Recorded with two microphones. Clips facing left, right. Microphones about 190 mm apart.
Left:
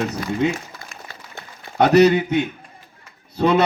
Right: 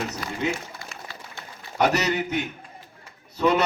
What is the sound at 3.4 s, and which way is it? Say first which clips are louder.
Speech: left 4 dB; 60° left (ahead or behind).